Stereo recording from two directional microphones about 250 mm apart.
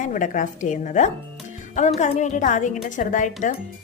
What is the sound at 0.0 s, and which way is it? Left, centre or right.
A woman's voice, left.